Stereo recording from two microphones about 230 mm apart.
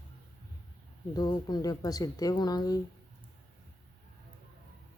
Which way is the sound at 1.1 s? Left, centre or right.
Centre.